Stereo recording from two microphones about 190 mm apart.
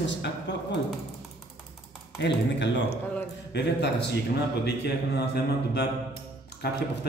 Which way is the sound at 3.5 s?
60° left (ahead or behind).